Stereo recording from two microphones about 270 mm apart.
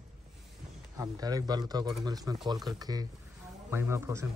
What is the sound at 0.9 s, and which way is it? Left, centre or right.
Speech, centre.